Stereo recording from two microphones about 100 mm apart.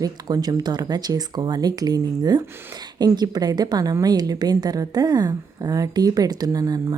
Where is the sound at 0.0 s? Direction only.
40° right (ahead or behind).